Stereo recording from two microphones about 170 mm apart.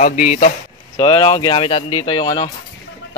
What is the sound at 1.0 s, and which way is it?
Speech, 25° left (ahead or behind).